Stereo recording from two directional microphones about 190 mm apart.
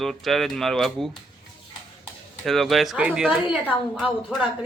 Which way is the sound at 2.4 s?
Centre (ahead or behind).